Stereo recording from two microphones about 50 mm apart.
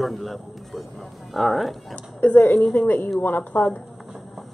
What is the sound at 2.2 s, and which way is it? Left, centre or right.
A woman's voice, left.